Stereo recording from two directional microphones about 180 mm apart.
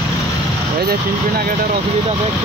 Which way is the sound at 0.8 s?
60° right (ahead or behind).